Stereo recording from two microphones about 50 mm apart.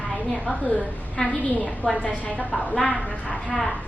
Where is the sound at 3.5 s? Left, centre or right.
Centre.